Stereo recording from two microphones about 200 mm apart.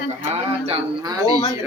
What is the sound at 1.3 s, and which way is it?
Speech, 20° left (ahead or behind).